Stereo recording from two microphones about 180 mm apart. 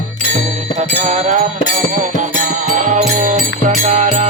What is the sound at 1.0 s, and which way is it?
Music, 40° right (ahead or behind).